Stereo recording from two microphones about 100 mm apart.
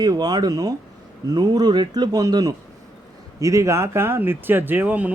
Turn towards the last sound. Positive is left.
turn(degrees=-15)  # may be behind; listen again after turning